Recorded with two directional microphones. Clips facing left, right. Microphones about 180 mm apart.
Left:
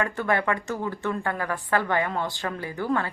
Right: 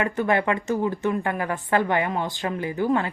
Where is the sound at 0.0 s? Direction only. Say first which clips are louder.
Right 3 dB; 20° right (ahead or behind).